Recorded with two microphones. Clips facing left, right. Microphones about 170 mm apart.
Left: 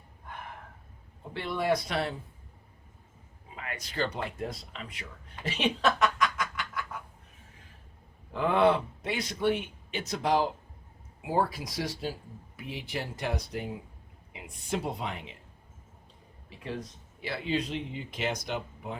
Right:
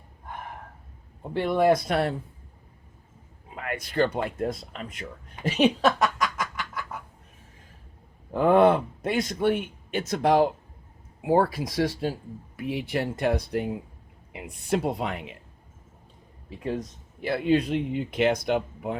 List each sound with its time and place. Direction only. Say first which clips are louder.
1.3 s a man's voice: right 8 dB; 50° right (ahead or behind)
3.5 s a man's voice: right 9 dB; 55° right (ahead or behind)
5.5 s a sound: right 6 dB; 45° right (ahead or behind)
8.3 s a man's voice: right 6 dB; 45° right (ahead or behind)
16.7 s speech: right 6 dB; 50° right (ahead or behind)